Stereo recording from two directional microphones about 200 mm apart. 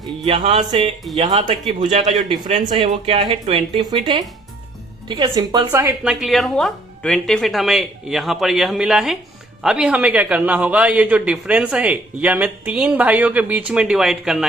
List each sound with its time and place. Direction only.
0.0 s a man's voice: 30° right (ahead or behind)
6.1 s a man's voice: centre (ahead or behind)